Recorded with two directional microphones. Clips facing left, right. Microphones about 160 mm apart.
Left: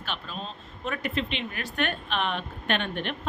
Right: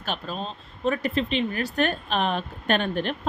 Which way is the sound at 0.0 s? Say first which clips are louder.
Right 5 dB; 40° right (ahead or behind).